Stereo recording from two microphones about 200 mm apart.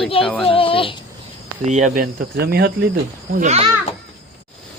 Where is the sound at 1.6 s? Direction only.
40° right (ahead or behind).